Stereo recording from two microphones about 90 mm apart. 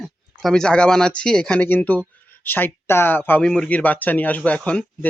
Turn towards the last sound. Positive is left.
turn(degrees=15)  # may be behind; listen again after turning